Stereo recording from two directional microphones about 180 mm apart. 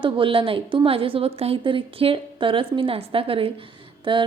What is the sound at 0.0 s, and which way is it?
A woman's voice, 30° right (ahead or behind).